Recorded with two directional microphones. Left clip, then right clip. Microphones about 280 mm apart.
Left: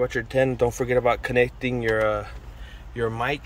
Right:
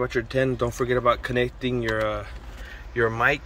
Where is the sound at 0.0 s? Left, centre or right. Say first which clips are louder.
Left 2 dB; centre.